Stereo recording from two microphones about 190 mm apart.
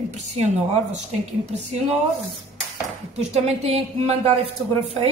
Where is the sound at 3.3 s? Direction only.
35° right (ahead or behind).